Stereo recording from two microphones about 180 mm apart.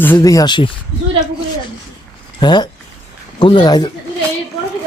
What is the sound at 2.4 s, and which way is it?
A man's voice, 25° left (ahead or behind).